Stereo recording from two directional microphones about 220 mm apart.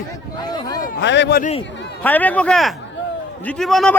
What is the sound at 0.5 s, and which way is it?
Speech, 20° left (ahead or behind).